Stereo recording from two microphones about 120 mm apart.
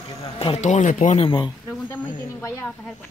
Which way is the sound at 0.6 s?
85° left.